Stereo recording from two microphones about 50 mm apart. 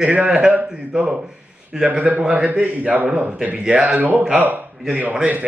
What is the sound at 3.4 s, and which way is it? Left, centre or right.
Speech, right.